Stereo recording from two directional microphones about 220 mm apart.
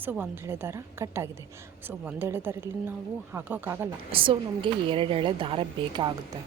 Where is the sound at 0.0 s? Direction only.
10° right (ahead or behind).